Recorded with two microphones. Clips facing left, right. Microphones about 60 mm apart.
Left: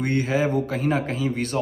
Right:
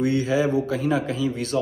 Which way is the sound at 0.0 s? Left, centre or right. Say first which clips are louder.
Right 1 dB; left.